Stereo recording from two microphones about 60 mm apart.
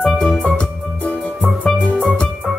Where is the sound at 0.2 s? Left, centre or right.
Centre.